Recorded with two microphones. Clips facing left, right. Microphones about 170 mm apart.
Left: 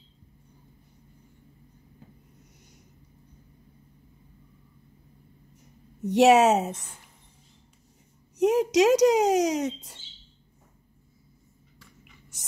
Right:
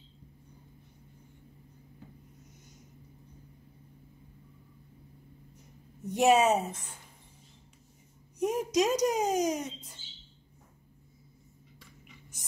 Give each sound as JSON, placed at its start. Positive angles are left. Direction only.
{"t": 6.0, "sound": "speech", "side_deg": 80}
{"t": 8.4, "sound": "speech", "side_deg": 80}